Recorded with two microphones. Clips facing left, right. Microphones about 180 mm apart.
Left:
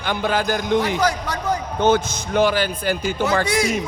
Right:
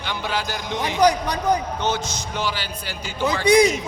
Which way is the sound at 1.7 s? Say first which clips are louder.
Left 7 dB; 55° left (ahead or behind).